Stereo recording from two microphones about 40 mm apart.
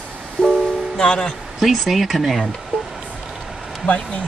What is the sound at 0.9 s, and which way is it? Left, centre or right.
Speech, left.